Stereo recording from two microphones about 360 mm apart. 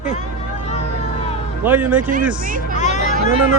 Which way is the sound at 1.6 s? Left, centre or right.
Centre.